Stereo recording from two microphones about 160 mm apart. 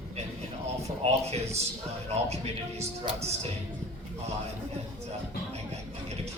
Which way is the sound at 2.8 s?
40° right (ahead or behind).